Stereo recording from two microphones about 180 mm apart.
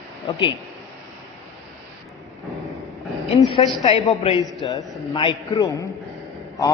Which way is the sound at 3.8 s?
30° left (ahead or behind).